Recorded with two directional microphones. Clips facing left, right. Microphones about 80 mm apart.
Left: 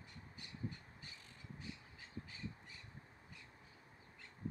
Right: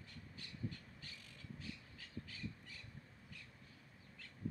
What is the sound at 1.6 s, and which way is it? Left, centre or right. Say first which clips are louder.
Squawk: even; left.